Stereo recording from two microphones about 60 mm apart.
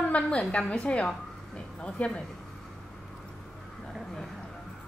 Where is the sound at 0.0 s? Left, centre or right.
Left.